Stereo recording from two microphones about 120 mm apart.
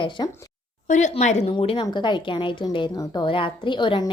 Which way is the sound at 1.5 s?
45° left (ahead or behind).